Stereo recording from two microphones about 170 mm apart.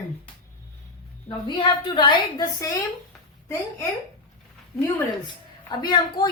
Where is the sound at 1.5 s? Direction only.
30° left (ahead or behind).